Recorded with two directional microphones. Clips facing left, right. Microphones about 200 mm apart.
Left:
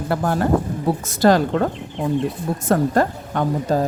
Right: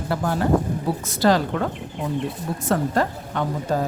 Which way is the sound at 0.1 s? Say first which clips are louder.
Left 2 dB; 50° left (ahead or behind).